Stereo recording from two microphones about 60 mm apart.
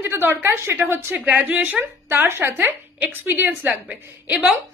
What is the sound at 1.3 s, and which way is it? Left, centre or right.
A woman's voice, right.